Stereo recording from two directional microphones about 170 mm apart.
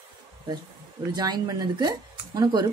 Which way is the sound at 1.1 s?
25° right (ahead or behind).